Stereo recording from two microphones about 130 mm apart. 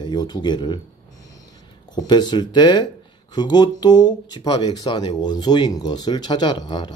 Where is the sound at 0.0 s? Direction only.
30° left (ahead or behind).